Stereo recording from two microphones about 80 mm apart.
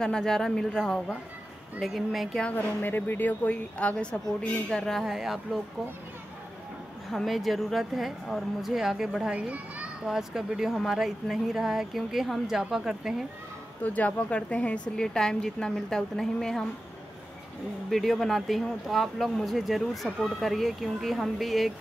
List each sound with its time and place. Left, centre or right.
0.0 s a woman's voice: centre
2.4 s a woman's voice: left; by 5.6 s centre
7.1 s speech: centre
13.8 s a woman's voice: centre
17.8 s speech: centre